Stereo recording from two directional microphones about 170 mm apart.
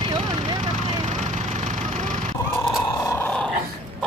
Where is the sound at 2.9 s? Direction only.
20° left (ahead or behind).